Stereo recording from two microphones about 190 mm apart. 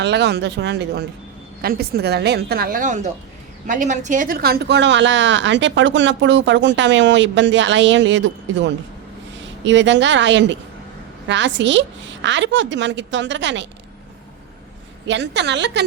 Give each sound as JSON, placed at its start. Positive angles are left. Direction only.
{"t": 0.0, "sound": "a woman's voice", "side_deg": -65}
{"t": 15.0, "sound": "a woman's voice", "side_deg": -65}